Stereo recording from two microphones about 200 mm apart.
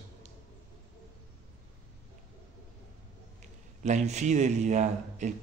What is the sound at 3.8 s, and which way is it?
A man's voice, 35° right (ahead or behind).